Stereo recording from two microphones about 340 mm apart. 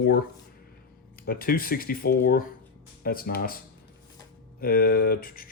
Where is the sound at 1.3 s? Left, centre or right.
Left.